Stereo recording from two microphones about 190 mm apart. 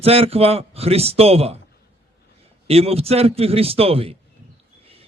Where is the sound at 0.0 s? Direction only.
30° right (ahead or behind).